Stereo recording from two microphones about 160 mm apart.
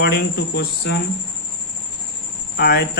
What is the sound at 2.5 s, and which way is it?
Speech, 90° left.